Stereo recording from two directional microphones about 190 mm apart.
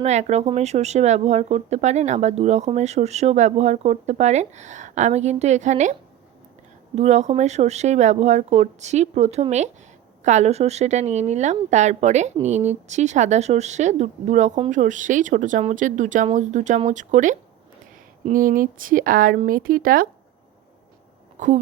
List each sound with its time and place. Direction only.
0.0 s a woman's voice: 35° right (ahead or behind)
21.3 s speech: 40° right (ahead or behind)